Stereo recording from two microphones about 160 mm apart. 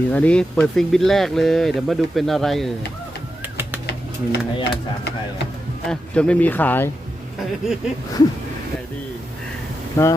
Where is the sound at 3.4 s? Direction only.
10° right (ahead or behind).